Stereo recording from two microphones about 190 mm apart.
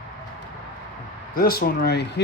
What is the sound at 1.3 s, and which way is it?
Speech, 55° left (ahead or behind).